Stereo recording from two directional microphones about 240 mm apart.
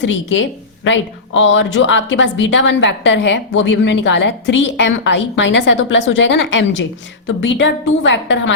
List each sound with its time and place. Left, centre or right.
0.0 s a woman's voice: left